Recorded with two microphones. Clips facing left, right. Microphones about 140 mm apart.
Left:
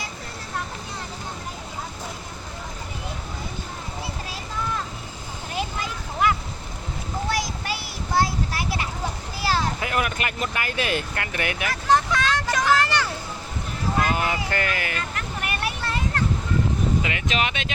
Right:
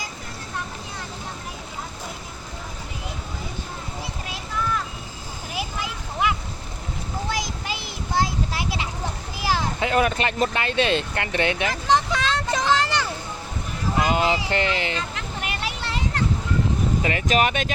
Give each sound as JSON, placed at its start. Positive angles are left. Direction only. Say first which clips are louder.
{"t": 5.5, "sound": "vehicle", "louder": "left 1 dB", "side_deg": -10}
{"t": 7.3, "sound": "a sound", "louder": "left 2 dB", "side_deg": -20}
{"t": 9.8, "sound": "speech", "louder": "right 5 dB", "side_deg": -30}
{"t": 14.0, "sound": "a sound", "louder": "right 4 dB", "side_deg": -20}
{"t": 14.5, "sound": "speech", "louder": "right 3 dB", "side_deg": -25}
{"t": 17.0, "sound": "speech", "louder": "right 4 dB", "side_deg": -40}